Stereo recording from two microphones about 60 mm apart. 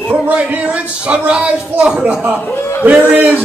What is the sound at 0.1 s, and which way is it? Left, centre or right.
Speech, right.